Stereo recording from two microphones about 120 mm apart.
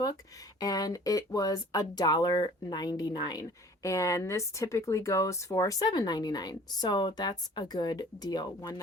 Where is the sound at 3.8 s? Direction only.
25° left (ahead or behind).